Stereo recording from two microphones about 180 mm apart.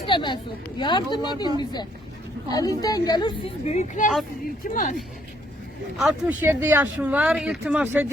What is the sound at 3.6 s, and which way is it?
Speech, 40° left (ahead or behind).